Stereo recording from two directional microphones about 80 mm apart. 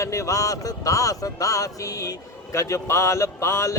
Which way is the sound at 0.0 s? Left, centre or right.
Left.